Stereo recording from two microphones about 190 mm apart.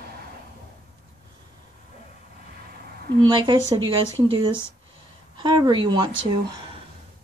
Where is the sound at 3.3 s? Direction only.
25° right (ahead or behind).